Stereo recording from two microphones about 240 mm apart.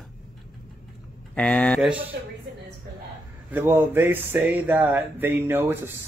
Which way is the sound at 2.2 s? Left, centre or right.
Right.